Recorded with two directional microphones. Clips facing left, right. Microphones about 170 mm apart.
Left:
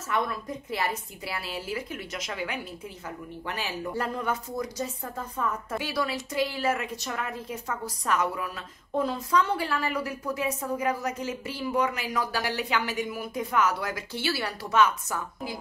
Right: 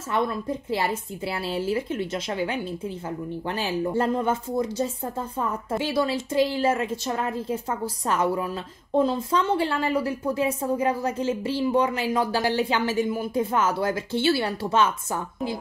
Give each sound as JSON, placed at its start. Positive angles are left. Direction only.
{"t": 0.1, "sound": "a woman's voice", "side_deg": -30}